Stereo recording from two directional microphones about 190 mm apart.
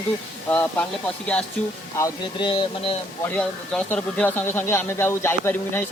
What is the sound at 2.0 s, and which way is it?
Speech, 25° left (ahead or behind).